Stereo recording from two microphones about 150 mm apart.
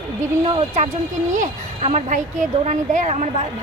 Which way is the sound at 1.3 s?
55° right (ahead or behind).